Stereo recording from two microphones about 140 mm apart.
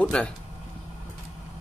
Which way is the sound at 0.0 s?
5° left (ahead or behind).